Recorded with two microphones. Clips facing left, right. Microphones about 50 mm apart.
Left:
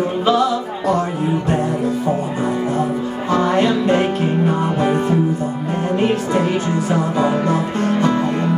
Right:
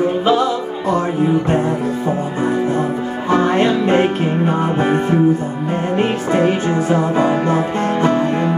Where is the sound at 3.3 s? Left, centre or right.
Right.